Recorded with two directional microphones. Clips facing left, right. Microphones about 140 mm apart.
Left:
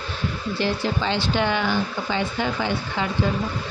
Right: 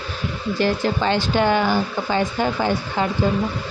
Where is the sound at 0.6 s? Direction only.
45° right (ahead or behind).